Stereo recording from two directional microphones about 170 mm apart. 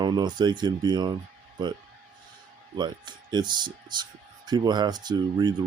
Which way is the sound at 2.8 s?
25° right (ahead or behind).